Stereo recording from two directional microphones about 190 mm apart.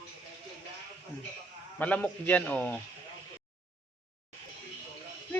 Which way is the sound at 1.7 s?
10° left (ahead or behind).